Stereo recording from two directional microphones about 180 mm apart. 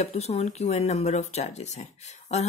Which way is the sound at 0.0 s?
35° left (ahead or behind).